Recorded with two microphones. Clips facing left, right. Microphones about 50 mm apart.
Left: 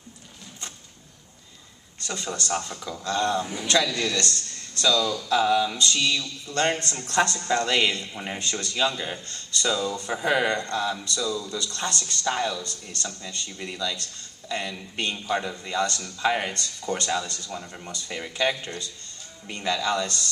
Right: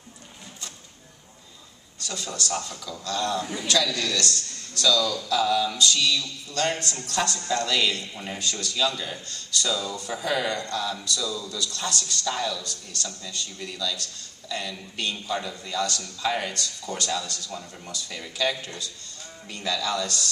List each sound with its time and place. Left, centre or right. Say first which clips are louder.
2.0 s a man's voice: left 2 dB; left